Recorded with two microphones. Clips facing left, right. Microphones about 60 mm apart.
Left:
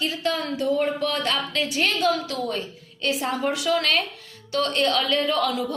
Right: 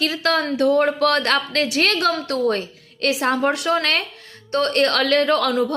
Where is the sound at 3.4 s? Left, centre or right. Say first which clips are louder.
Right 4 dB; right.